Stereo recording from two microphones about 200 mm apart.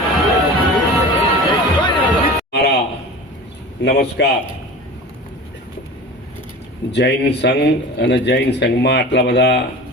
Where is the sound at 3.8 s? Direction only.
55° left (ahead or behind).